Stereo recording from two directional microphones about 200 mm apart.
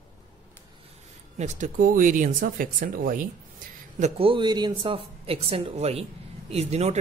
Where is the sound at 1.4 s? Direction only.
35° right (ahead or behind).